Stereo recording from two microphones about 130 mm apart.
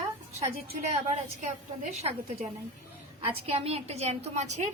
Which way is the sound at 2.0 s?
55° right (ahead or behind).